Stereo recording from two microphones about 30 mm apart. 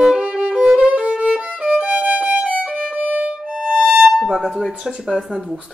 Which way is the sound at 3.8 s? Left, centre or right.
Right.